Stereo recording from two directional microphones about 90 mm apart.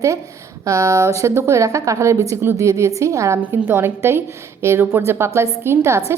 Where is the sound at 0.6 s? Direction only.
35° right (ahead or behind).